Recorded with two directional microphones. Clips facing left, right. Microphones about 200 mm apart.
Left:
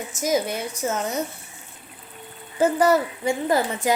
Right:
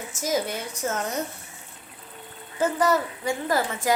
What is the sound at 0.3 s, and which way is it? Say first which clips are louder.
Speech: left 3 dB; 10° left (ahead or behind).